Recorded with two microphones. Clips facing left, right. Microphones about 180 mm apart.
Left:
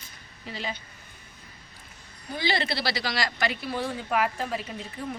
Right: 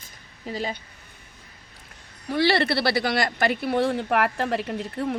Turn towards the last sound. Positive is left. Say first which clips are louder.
# right 8 dB
turn(degrees=-65)  # may be behind; listen again after turning